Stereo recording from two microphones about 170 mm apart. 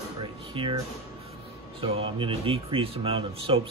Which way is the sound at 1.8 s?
35° right (ahead or behind).